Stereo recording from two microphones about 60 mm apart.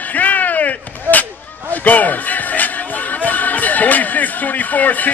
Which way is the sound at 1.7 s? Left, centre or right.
Left.